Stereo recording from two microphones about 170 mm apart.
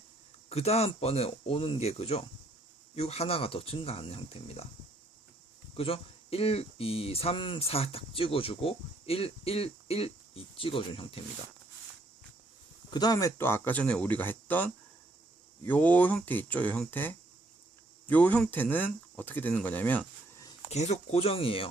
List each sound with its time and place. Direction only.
0.5 s speech: 35° left (ahead or behind)
5.7 s speech: 35° left (ahead or behind)
12.9 s speech: 25° left (ahead or behind)
20.7 s speech: 40° left (ahead or behind)